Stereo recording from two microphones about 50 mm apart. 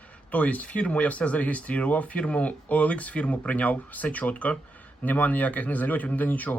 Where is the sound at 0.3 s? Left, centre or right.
Left.